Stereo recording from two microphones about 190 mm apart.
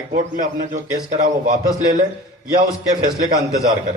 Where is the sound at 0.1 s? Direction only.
50° right (ahead or behind).